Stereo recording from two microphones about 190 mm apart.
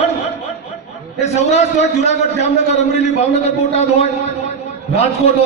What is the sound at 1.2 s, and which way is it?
A man's voice, 35° left (ahead or behind).